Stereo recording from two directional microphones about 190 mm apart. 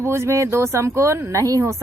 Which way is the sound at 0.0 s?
15° right (ahead or behind).